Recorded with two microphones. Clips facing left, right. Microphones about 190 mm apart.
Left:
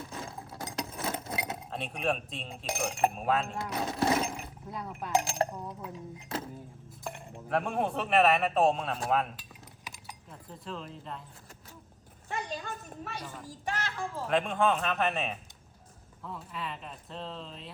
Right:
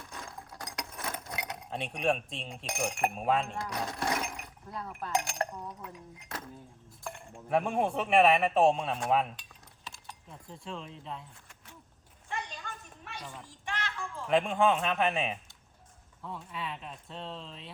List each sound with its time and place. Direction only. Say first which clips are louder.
0.0 s chink: left 4 dB; 25° left (ahead or behind)
1.7 s speech: right 2 dB; 5° left (ahead or behind)
3.6 s speech: left 4 dB; 25° left (ahead or behind)
7.0 s chink: left 2 dB; 20° left (ahead or behind)
7.4 s speech: right 2 dB; centre (ahead or behind)
9.8 s keys jangling: even; 15° left (ahead or behind)
10.2 s speech: left 1 dB; centre (ahead or behind)
12.3 s a sound: left 4 dB; 40° left (ahead or behind)
13.5 s a child's voice: left 4 dB; 40° left (ahead or behind)
14.3 s speech: right 2 dB; centre (ahead or behind)